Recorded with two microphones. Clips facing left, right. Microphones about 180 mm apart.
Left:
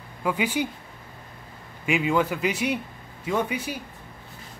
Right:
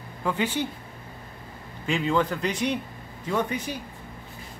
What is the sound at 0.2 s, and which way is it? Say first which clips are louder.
Speech: left 1 dB; 10° left (ahead or behind).